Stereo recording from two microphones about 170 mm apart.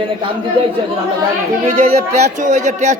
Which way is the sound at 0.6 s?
30° right (ahead or behind).